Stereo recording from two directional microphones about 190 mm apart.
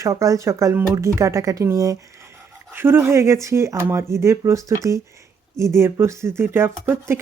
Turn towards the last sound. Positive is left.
turn(degrees=-10)  # may be behind; listen again after turning